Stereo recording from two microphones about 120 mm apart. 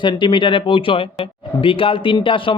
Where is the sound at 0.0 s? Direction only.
40° left (ahead or behind).